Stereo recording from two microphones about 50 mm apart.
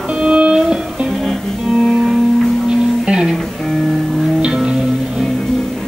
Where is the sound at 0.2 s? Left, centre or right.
Centre.